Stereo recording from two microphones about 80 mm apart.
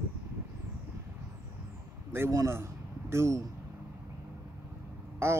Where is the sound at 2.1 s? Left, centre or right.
Right.